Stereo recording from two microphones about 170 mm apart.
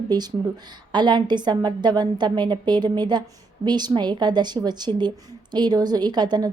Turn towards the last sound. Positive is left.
turn(degrees=-25)  # may be behind; listen again after turning